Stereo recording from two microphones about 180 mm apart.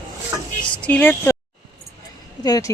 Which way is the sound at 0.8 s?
10° left (ahead or behind).